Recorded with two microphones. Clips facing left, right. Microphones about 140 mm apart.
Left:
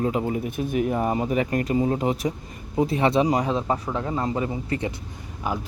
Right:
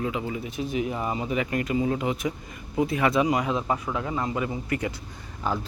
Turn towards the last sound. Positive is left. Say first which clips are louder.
# even
turn(degrees=10)  # may be behind; listen again after turning